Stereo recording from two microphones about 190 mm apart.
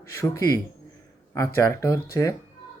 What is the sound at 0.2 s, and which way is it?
Speech, 15° left (ahead or behind).